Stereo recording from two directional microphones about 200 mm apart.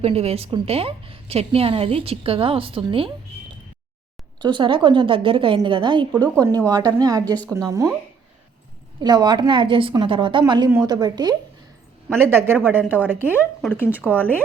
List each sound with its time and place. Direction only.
0.0 s a woman's voice: 30° right (ahead or behind)
4.4 s a woman's voice: 25° right (ahead or behind)
9.0 s a woman's voice: 20° right (ahead or behind)
14.0 s speech: 10° left (ahead or behind)